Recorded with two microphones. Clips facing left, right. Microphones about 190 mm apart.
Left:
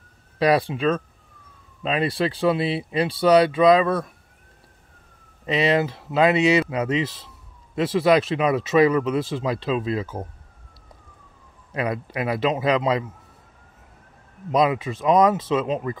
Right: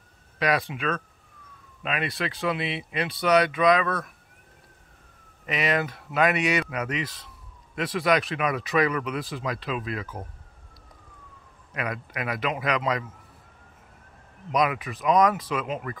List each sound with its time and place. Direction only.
0.4 s speech: 30° left (ahead or behind)
5.5 s speech: 30° left (ahead or behind)
11.7 s speech: 30° left (ahead or behind)
14.5 s speech: 25° left (ahead or behind)